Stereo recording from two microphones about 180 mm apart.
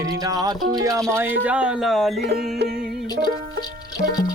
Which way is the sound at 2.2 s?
65° right (ahead or behind).